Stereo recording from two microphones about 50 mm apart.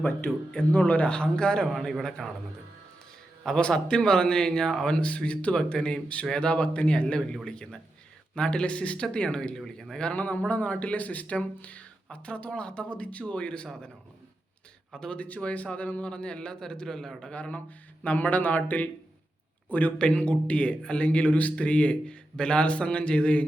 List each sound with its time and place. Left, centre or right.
0.3 s speech: centre
0.7 s a man's voice: left
1.0 s speech: centre
1.7 s a man's voice: centre
3.6 s speech: centre
4.9 s a man's voice: left
9.9 s a man's voice: centre
14.9 s speech: centre
15.5 s a man's voice: left; by 17.3 s centre
17.3 s a man's voice: left
20.0 s a man's voice: left